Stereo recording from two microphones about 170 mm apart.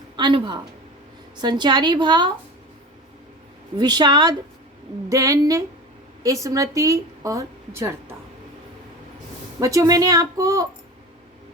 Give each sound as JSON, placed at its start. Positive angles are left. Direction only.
{"t": 0.2, "sound": "a woman's voice", "side_deg": -30}
{"t": 3.8, "sound": "a woman's voice", "side_deg": -25}
{"t": 9.6, "sound": "a woman's voice", "side_deg": -20}